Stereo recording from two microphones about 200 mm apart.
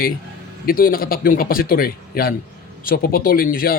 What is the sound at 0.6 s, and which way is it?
Speech, 45° left (ahead or behind).